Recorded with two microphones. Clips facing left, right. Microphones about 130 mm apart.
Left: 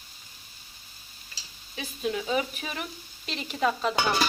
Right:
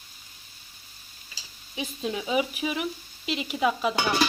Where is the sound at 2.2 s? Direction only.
10° right (ahead or behind).